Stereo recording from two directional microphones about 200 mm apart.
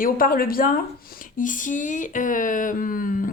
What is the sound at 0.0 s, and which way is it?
A woman's voice, 45° left (ahead or behind).